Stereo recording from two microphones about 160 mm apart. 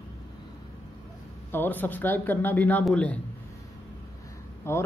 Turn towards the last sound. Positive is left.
turn(degrees=15)  # may be behind; listen again after turning